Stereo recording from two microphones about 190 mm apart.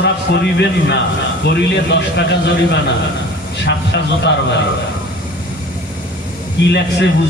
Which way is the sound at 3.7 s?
65° left (ahead or behind).